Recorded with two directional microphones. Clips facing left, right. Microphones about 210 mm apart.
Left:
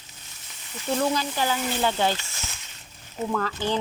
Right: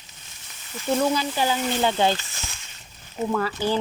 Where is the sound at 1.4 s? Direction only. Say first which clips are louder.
Right 2 dB; 20° right (ahead or behind).